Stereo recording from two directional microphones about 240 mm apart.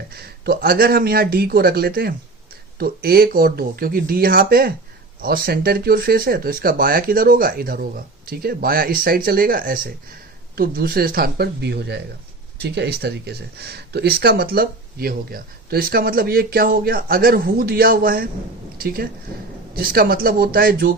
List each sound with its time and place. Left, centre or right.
0.1 s speech: right